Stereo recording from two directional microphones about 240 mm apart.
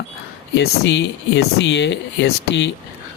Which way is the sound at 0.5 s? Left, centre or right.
Left.